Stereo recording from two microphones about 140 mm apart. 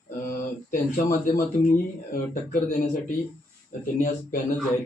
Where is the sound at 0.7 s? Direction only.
85° left.